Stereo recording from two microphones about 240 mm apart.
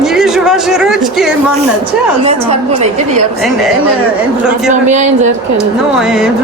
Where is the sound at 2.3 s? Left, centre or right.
Right.